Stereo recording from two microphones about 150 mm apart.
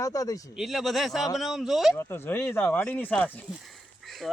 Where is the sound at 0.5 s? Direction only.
Centre (ahead or behind).